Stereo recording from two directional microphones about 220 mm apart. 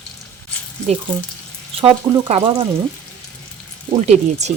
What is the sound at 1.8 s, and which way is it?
Speech, 25° right (ahead or behind).